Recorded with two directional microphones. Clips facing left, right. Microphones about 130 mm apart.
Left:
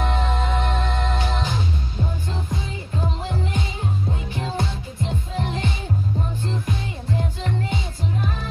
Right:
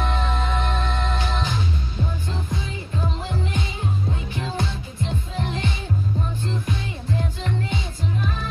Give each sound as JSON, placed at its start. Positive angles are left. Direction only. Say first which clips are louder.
{"t": 0.0, "sound": "music", "louder": "left 1 dB", "side_deg": 40}